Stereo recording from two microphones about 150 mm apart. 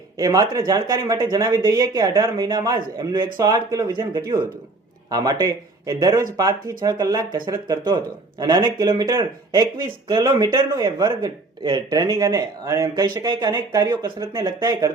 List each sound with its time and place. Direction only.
0.2 s speech: 25° right (ahead or behind)